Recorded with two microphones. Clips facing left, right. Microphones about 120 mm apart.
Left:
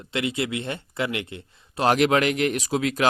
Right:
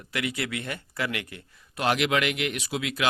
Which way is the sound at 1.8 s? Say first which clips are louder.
Left 5 dB; 40° left (ahead or behind).